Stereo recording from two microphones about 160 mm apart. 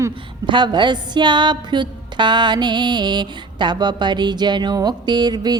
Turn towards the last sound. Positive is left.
turn(degrees=-25)  # may be behind; listen again after turning